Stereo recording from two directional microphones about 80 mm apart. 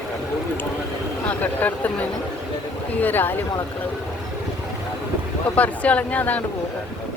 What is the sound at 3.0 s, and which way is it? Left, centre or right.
Speech, left.